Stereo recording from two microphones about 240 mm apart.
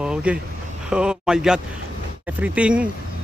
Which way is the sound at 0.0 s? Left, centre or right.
Centre.